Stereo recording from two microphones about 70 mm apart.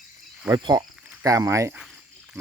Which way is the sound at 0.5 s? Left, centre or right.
Right.